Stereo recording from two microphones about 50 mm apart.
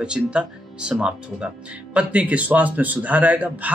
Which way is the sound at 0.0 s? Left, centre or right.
Right.